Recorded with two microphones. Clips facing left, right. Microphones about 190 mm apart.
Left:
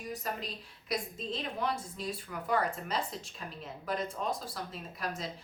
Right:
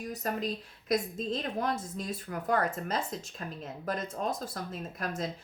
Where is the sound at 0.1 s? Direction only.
45° right (ahead or behind).